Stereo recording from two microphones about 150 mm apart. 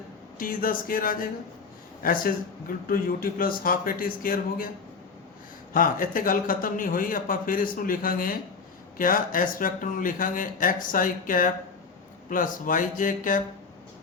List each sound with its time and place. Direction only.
0.3 s a man's voice: 70° left (ahead or behind)
5.7 s a man's voice: 65° left (ahead or behind)